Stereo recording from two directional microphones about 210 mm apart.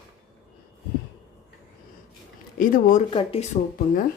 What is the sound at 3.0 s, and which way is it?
Speech, 25° left (ahead or behind).